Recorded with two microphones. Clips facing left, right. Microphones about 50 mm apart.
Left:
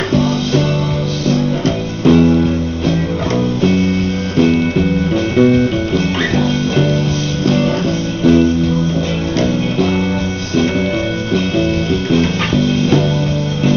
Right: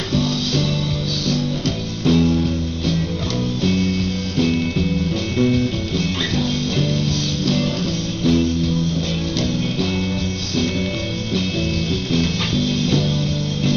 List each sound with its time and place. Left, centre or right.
0.1 s music: left
2.0 s music: left
7.4 s music: left
12.1 s music: left